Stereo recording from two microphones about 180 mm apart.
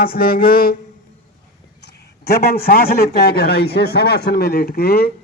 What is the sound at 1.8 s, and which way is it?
A man's voice, 65° left (ahead or behind).